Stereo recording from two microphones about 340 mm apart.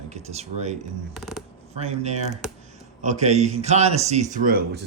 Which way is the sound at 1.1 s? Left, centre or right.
Centre.